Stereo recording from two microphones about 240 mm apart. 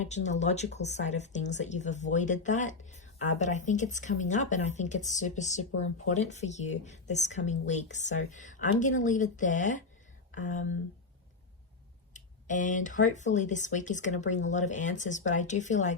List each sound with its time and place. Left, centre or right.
0.0 s speech: left
12.1 s speech: left